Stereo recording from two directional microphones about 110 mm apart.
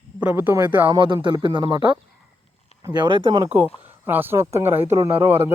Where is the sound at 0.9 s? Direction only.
45° right (ahead or behind).